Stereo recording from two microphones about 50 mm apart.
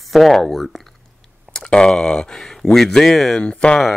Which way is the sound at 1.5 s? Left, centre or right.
Centre.